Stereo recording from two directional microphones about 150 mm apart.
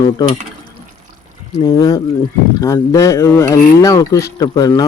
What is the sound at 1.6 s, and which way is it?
Speech, 25° left (ahead or behind).